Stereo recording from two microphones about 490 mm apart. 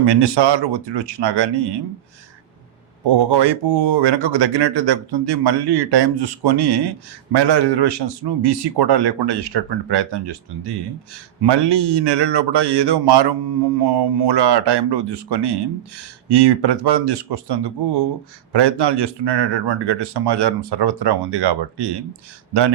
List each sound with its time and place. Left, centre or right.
0.0 s speech: right
3.1 s speech: right